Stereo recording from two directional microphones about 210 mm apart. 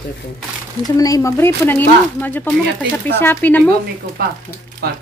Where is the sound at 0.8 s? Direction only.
15° left (ahead or behind).